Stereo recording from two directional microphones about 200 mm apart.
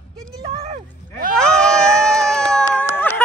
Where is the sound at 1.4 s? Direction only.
5° left (ahead or behind).